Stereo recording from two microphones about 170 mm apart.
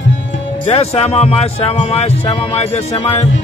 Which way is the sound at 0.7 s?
35° left (ahead or behind).